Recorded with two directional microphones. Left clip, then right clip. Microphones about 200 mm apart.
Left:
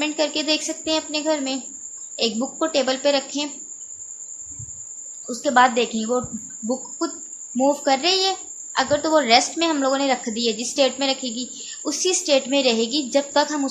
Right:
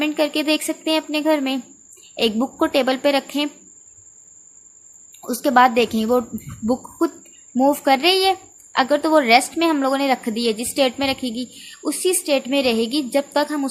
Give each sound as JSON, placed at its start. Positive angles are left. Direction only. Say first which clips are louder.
{"t": 0.0, "sound": "a child's voice", "louder": "right 2 dB", "side_deg": -25}
{"t": 5.3, "sound": "a child's voice", "louder": "right 2 dB", "side_deg": -30}
{"t": 7.5, "sound": "a child's voice", "louder": "right 3 dB", "side_deg": -25}